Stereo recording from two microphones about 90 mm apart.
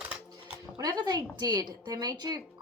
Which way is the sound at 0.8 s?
50° right (ahead or behind).